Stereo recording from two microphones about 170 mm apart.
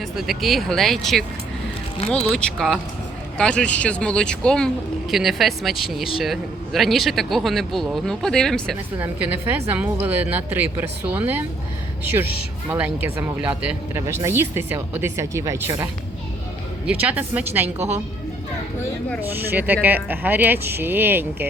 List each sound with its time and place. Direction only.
0.2 s speech: centre (ahead or behind)
2.3 s speech: 5° left (ahead or behind)
9.0 s speech: 10° right (ahead or behind)
12.6 s speech: 10° right (ahead or behind)
19.2 s speech: 10° right (ahead or behind)